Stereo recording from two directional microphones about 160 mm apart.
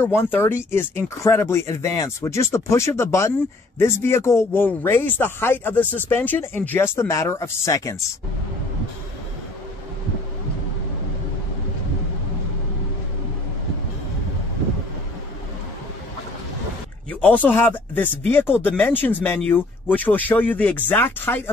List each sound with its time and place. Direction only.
0.0 s speech: 15° left (ahead or behind)
17.1 s speech: 10° left (ahead or behind)